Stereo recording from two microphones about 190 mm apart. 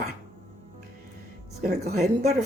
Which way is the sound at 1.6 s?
40° right (ahead or behind).